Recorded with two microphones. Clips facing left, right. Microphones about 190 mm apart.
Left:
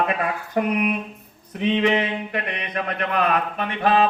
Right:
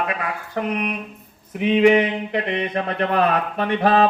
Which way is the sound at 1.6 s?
10° right (ahead or behind).